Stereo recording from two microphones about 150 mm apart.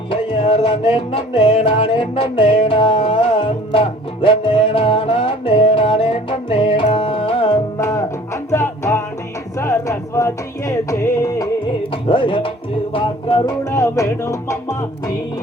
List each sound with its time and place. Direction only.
0.1 s music: 35° left (ahead or behind)
7.8 s music: 20° left (ahead or behind)
12.0 s music: 35° left (ahead or behind)
13.7 s music: 20° left (ahead or behind)